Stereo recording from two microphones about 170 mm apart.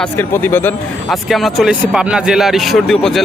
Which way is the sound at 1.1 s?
Centre (ahead or behind).